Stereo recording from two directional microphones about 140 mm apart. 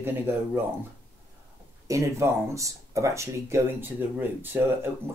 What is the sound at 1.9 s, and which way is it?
Speech, 20° right (ahead or behind).